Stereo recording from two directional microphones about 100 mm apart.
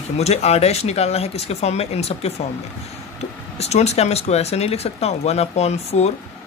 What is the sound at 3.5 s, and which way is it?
Speech, 90° left.